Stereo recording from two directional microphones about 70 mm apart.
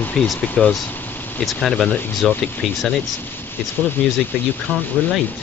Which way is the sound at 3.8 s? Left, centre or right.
Left.